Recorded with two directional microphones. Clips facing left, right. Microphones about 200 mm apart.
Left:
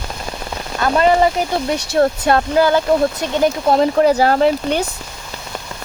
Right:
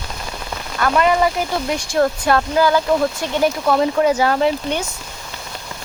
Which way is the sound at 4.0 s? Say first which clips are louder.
Left 3 dB; 40° left (ahead or behind).